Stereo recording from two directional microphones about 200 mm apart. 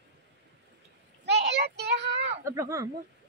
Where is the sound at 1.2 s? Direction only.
60° right (ahead or behind).